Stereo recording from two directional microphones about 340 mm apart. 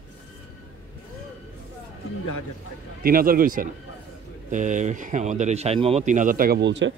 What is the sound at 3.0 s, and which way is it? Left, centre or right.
Speech, right.